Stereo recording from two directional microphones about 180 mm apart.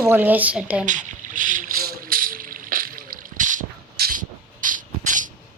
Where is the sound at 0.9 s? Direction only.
45° right (ahead or behind).